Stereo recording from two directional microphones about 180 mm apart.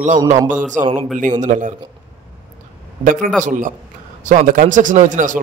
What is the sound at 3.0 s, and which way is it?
A man's voice, 50° right (ahead or behind).